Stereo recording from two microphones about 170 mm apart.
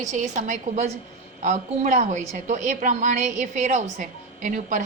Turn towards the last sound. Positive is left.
turn(degrees=-50)  # may be behind; listen again after turning